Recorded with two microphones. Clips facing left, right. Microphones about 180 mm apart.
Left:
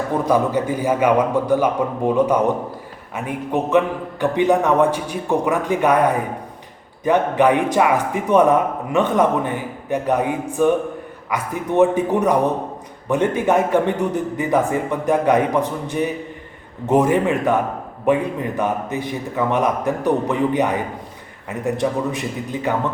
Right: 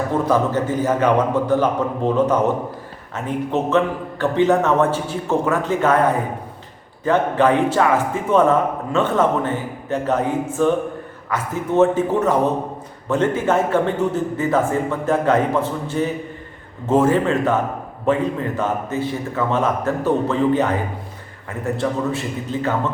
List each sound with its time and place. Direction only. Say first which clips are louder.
0.1 s speech: left 2 dB; 15° left (ahead or behind)